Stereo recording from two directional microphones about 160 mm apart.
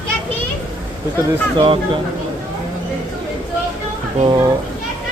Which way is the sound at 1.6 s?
35° right (ahead or behind).